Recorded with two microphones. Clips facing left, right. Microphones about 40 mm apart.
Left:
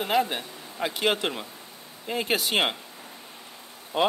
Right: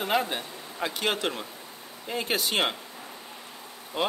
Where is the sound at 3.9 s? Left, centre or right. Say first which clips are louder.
Left 5 dB; left.